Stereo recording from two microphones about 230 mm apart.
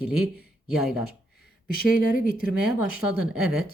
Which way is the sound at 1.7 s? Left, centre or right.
Left.